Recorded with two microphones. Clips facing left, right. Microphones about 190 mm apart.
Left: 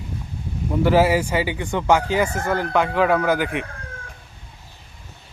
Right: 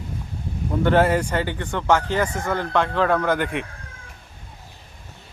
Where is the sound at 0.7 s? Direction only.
5° left (ahead or behind).